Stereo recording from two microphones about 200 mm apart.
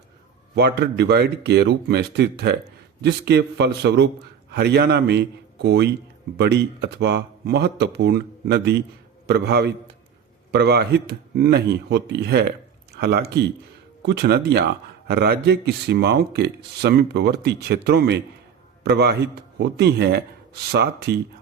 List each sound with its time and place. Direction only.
0.5 s speech: 55° right (ahead or behind)